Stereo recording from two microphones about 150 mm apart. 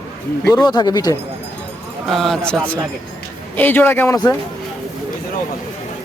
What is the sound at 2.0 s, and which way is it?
Speech, centre (ahead or behind).